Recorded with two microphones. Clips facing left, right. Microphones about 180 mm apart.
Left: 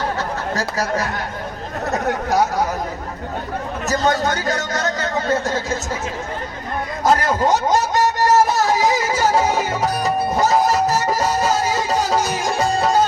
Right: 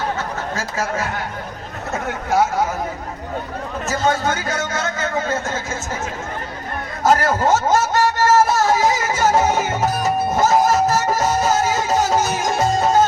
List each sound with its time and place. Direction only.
0.2 s a sound: 35° left (ahead or behind)
1.9 s a man's voice: 40° left (ahead or behind)
3.8 s a man's voice: 40° left (ahead or behind)
7.0 s speech: 15° left (ahead or behind)